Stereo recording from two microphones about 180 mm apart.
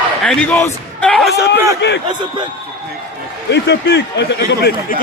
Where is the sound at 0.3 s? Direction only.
5° left (ahead or behind).